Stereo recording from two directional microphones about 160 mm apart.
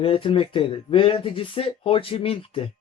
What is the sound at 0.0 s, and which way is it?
Speech, 35° left (ahead or behind).